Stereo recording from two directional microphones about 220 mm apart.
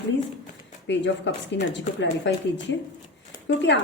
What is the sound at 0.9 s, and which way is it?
A woman's voice, 55° left (ahead or behind).